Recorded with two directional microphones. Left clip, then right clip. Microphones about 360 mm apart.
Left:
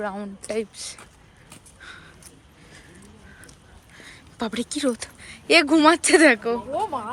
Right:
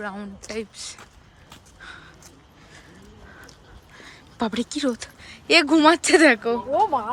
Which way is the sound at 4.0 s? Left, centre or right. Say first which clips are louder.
Right 3 dB; centre.